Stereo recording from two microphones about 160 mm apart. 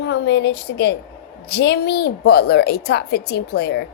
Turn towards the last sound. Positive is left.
turn(degrees=90)